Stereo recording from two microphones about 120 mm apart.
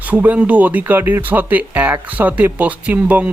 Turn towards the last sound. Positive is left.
turn(degrees=-10)  # may be behind; listen again after turning